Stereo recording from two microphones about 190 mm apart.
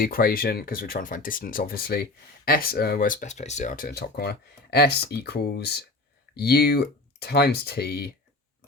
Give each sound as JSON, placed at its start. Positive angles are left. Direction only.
{"t": 0.0, "sound": "speech", "side_deg": 50}